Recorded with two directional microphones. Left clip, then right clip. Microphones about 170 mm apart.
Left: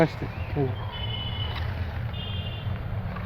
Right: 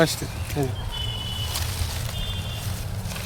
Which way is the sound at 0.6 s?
Centre (ahead or behind).